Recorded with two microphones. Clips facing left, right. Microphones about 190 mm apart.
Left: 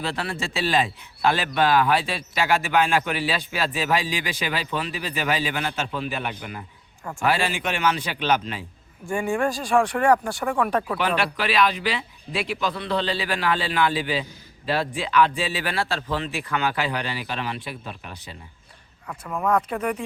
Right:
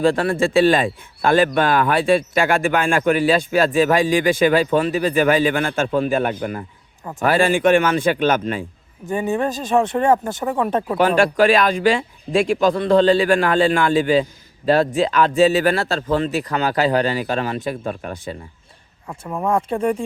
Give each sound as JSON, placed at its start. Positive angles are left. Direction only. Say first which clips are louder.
{"t": 0.0, "sound": "speech", "louder": "right 12 dB", "side_deg": -50}
{"t": 9.0, "sound": "speech", "louder": "right 3 dB", "side_deg": -20}
{"t": 10.9, "sound": "speech", "louder": "right 9 dB", "side_deg": -45}
{"t": 19.0, "sound": "speech", "louder": "right 3 dB", "side_deg": -25}